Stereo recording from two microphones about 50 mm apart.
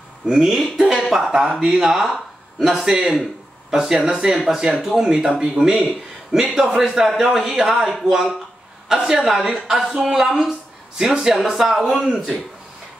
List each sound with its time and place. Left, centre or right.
0.3 s a woman's voice: centre